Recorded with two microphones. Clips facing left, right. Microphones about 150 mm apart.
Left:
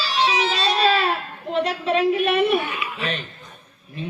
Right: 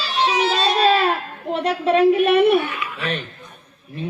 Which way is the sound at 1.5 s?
55° right (ahead or behind).